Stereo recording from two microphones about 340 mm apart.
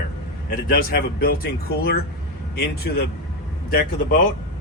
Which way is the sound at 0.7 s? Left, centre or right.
Left.